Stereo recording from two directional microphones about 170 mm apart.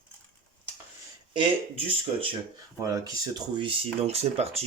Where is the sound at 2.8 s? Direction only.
20° right (ahead or behind); by 4.6 s 40° right (ahead or behind).